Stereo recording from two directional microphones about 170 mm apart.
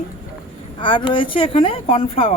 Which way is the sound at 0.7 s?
30° left (ahead or behind).